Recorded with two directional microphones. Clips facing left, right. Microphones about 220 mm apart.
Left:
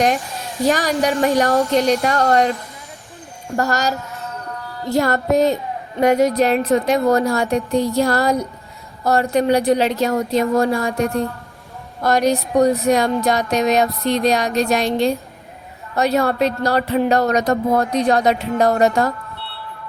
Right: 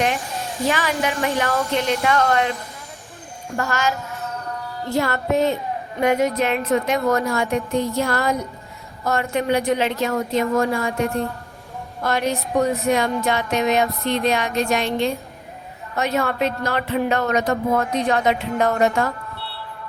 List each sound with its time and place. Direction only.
0.7 s speech: 40° left (ahead or behind)
3.6 s speech: 40° left (ahead or behind)
11.0 s a woman's voice: centre (ahead or behind)
12.0 s speech: 40° left (ahead or behind)